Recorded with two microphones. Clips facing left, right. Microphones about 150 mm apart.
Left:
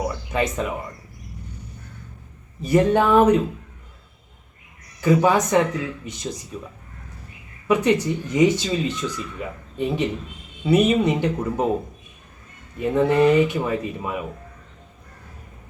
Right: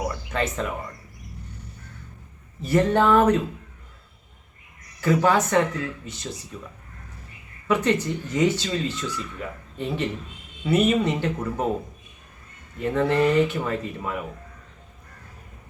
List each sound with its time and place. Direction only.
0.3 s speech: 15° left (ahead or behind)
2.6 s speech: 15° left (ahead or behind)
4.9 s speech: 15° left (ahead or behind)
7.7 s speech: 15° left (ahead or behind)
12.8 s speech: 15° left (ahead or behind)